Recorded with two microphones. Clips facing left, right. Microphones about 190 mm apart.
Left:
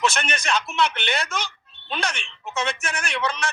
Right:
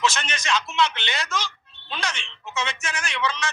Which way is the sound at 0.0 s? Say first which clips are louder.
Left 1 dB; 55° left (ahead or behind).